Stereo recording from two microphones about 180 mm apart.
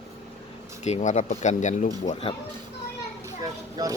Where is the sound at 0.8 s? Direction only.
40° left (ahead or behind).